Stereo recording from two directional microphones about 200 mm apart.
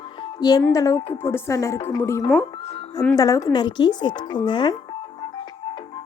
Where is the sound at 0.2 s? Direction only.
20° left (ahead or behind).